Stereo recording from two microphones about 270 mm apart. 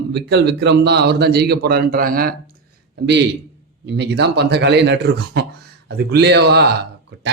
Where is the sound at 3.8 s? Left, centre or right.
Right.